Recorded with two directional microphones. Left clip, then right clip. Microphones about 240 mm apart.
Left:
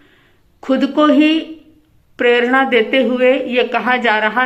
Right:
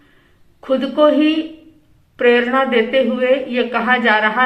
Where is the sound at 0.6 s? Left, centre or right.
Left.